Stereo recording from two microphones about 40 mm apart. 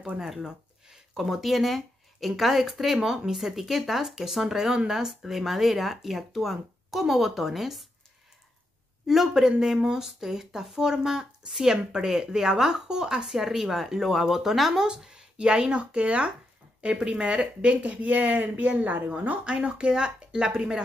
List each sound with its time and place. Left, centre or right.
0.3 s speech: centre
9.0 s speech: centre
15.0 s a sound: centre
15.3 s speech: right
19.4 s speech: right